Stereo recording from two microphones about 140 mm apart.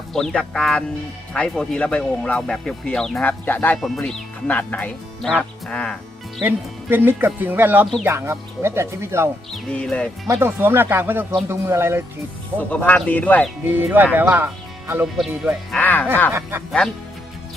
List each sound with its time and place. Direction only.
0.1 s speech: 5° left (ahead or behind)
3.8 s speech: centre (ahead or behind)
6.4 s speech: 10° right (ahead or behind)
9.5 s speech: 5° left (ahead or behind)
10.2 s speech: 20° right (ahead or behind)
12.7 s speech: 10° left (ahead or behind)
13.7 s speech: 15° right (ahead or behind)
15.7 s speech: 10° left (ahead or behind)
16.3 s speech: 15° right (ahead or behind)